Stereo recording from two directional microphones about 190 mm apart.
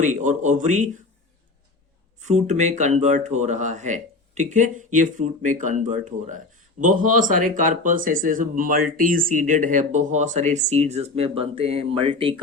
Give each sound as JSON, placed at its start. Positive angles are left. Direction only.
{"t": 0.0, "sound": "speech", "side_deg": -40}
{"t": 2.2, "sound": "speech", "side_deg": -40}